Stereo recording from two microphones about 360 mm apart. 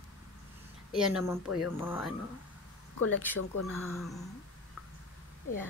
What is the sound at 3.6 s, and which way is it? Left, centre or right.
Speech, centre.